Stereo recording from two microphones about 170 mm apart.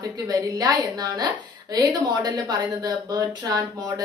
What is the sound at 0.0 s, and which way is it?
Speech, 25° right (ahead or behind).